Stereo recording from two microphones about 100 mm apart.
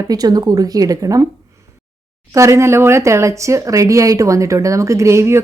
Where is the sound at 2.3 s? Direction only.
30° right (ahead or behind).